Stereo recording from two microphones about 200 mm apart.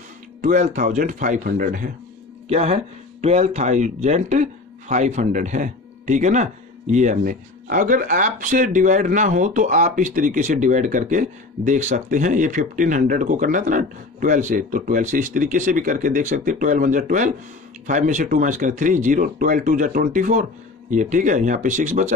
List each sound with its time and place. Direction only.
0.4 s speech: 40° right (ahead or behind)
2.4 s speech: 30° right (ahead or behind)